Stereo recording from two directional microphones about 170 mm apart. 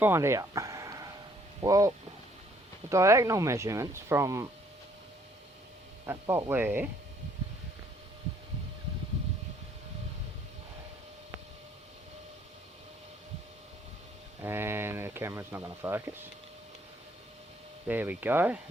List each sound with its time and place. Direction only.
0.0 s a sound: 15° right (ahead or behind)
1.6 s speech: 20° right (ahead or behind)
2.9 s speech: 20° right (ahead or behind)
6.1 s speech: 15° right (ahead or behind)
14.4 s speech: 15° right (ahead or behind)
17.8 s speech: 10° right (ahead or behind)